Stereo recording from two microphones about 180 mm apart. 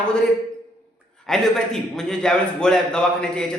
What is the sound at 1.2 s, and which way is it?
Speech, centre (ahead or behind).